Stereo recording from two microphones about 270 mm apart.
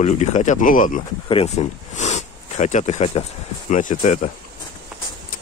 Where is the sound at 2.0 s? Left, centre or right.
Left.